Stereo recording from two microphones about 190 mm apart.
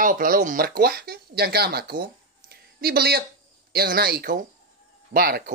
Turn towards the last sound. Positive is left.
turn(degrees=-55)  # may be behind; listen again after turning